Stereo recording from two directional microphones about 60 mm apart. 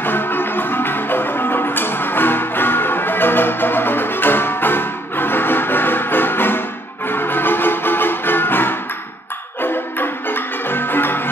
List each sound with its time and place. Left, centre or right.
0.0 s music: left